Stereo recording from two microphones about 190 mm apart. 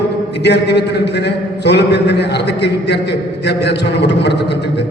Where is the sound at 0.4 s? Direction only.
60° left (ahead or behind).